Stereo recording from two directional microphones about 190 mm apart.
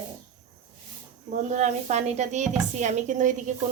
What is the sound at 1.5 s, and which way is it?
A woman's voice, 40° right (ahead or behind).